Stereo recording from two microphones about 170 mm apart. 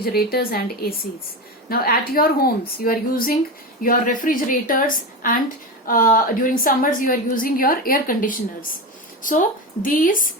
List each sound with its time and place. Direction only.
0.0 s a woman's voice: 65° left (ahead or behind)